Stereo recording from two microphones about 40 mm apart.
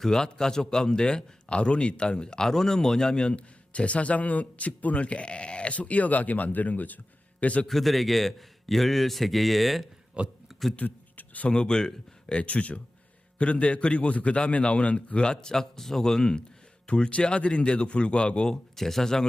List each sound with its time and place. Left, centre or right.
0.0 s a man's voice: centre
3.3 s speech: left
7.7 s a man's voice: centre
10.2 s speech: right
10.8 s a sound: left
11.4 s a man's voice: left
12.4 s a man's voice: left
18.8 s a man's voice: centre